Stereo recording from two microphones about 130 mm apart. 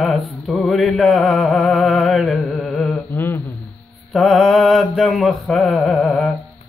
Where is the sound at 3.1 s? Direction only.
15° left (ahead or behind).